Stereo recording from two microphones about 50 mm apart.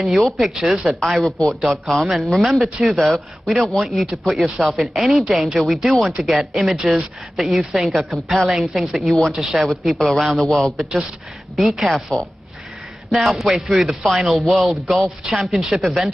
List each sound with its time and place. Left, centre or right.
0.0 s a man's voice: centre
10.4 s a man's voice: centre
11.5 s a man's voice: centre